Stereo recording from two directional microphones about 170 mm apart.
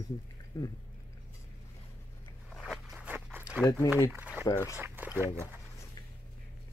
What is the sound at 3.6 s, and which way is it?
Speech, 15° left (ahead or behind).